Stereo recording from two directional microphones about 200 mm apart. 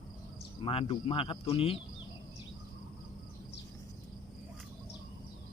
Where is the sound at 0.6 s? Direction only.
25° left (ahead or behind).